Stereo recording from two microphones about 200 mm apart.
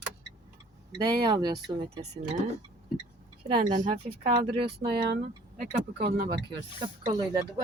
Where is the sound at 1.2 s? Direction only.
20° right (ahead or behind).